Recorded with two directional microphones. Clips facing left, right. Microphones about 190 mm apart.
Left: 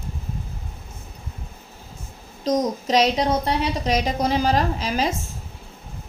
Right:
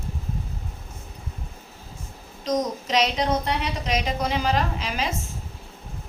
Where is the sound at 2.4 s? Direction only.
35° left (ahead or behind).